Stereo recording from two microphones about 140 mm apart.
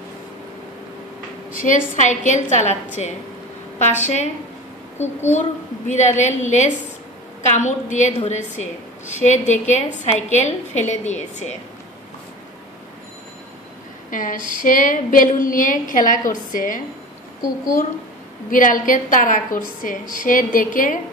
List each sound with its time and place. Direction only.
1.5 s a woman's voice: 70° left (ahead or behind)
3.8 s a woman's voice: 55° left (ahead or behind)
5.3 s a woman's voice: 60° left (ahead or behind)
14.1 s a woman's voice: 70° left (ahead or behind)
18.5 s a woman's voice: 70° left (ahead or behind)